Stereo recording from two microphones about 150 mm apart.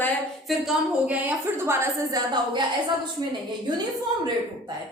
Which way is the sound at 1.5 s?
15° right (ahead or behind).